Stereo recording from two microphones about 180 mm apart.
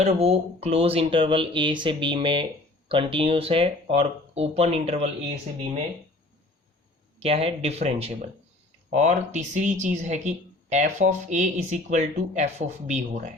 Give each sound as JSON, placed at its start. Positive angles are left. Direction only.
{"t": 0.0, "sound": "speech", "side_deg": -35}
{"t": 7.2, "sound": "speech", "side_deg": -35}